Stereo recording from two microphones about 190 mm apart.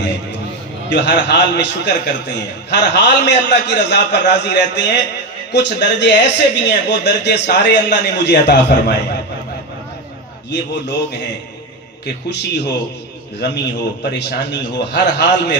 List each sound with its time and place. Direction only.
0.8 s a man's voice: 65° left (ahead or behind)
10.5 s a man's voice: 65° left (ahead or behind)
12.3 s a man's voice: 65° left (ahead or behind)